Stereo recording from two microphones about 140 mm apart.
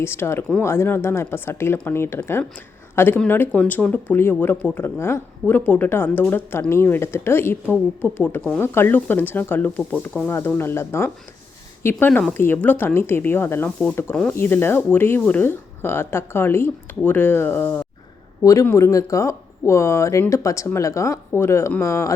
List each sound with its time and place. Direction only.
0.0 s a woman's voice: 20° left (ahead or behind)